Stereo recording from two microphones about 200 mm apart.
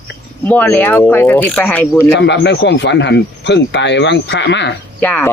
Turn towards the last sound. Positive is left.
turn(degrees=10)  # may be behind; listen again after turning